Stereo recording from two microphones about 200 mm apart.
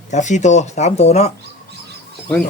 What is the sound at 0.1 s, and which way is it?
Speech, 35° left (ahead or behind).